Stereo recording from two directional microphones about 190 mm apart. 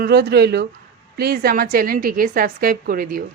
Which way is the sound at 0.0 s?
55° right (ahead or behind).